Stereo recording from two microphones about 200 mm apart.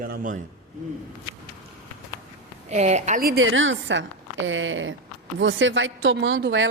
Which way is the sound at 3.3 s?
75° right (ahead or behind).